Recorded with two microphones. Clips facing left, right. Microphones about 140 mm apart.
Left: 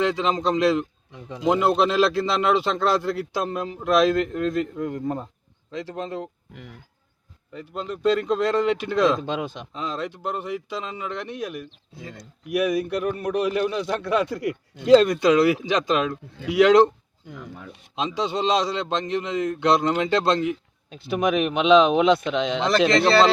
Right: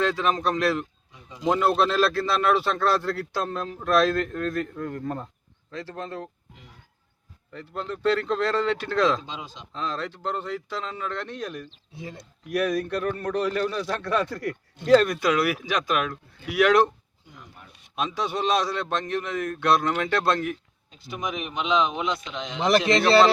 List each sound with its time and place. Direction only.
0.0 s speech: 15° left (ahead or behind)
1.1 s speech: 60° left (ahead or behind)
1.5 s speech: 15° left (ahead or behind)
6.5 s speech: 60° left (ahead or behind)
7.5 s speech: 15° left (ahead or behind)
9.2 s speech: 60° left (ahead or behind)
9.7 s speech: 15° left (ahead or behind)
11.9 s speech: 25° right (ahead or behind)
12.5 s a man's voice: 10° left (ahead or behind)
17.3 s speech: 90° left
17.9 s a man's voice: 20° left (ahead or behind)
20.9 s speech: 65° left (ahead or behind)